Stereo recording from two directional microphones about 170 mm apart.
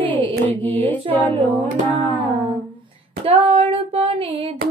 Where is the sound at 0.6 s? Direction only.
10° left (ahead or behind).